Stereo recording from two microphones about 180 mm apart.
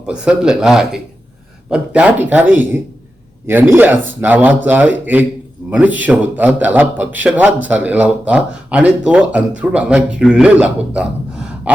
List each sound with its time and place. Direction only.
0.0 s a man's voice: 5° right (ahead or behind)